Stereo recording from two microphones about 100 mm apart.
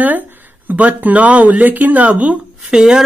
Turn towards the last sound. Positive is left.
turn(degrees=-5)  # may be behind; listen again after turning